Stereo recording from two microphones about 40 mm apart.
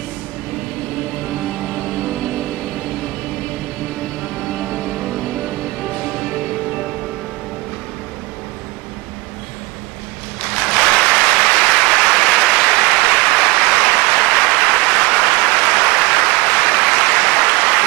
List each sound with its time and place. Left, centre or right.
0.9 s music: centre
10.4 s applause: centre